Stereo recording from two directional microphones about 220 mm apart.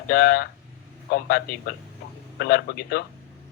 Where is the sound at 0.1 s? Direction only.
45° left (ahead or behind).